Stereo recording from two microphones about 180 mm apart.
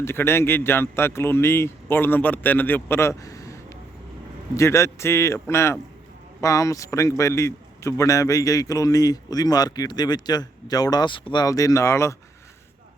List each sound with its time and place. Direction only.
0.0 s a man's voice: 15° left (ahead or behind)